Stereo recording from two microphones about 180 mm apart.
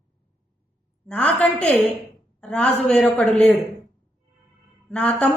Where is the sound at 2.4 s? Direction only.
5° left (ahead or behind).